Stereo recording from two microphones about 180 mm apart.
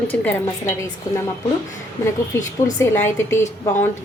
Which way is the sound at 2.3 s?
15° left (ahead or behind).